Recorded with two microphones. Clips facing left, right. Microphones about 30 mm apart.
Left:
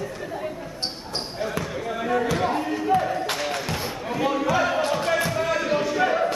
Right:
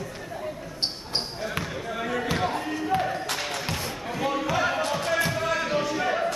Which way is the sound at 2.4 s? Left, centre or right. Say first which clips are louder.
Left 3 dB; centre.